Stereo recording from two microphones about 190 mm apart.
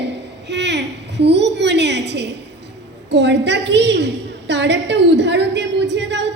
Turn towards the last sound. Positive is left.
turn(degrees=-65)  # may be behind; listen again after turning